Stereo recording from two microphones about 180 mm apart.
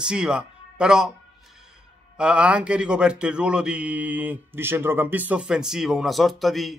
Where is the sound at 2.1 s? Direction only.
5° right (ahead or behind).